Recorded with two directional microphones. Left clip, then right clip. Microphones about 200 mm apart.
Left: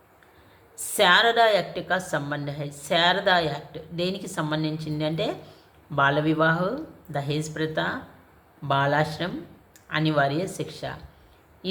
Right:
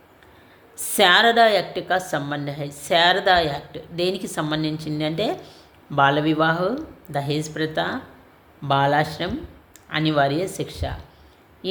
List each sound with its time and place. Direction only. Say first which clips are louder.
0.9 s a woman's voice: right 3 dB; 25° right (ahead or behind)